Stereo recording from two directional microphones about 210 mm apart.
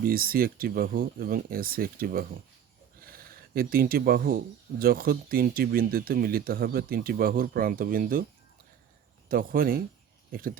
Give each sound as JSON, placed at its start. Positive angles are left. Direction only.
{"t": 0.0, "sound": "speech", "side_deg": -45}
{"t": 9.3, "sound": "speech", "side_deg": -45}